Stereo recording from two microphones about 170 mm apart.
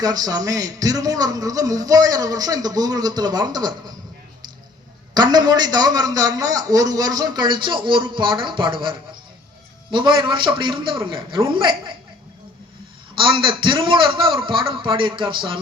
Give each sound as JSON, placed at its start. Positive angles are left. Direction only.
{"t": 0.0, "sound": "speech", "side_deg": -20}
{"t": 5.1, "sound": "speech", "side_deg": -25}
{"t": 13.1, "sound": "speech", "side_deg": -30}